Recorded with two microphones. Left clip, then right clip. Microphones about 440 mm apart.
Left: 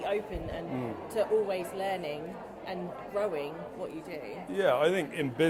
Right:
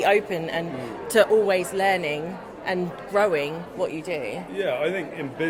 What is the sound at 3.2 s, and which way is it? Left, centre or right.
Speech, right.